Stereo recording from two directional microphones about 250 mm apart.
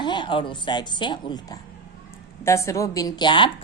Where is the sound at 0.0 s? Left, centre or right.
Centre.